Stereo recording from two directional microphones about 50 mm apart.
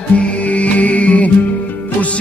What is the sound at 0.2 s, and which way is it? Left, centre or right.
Music, left.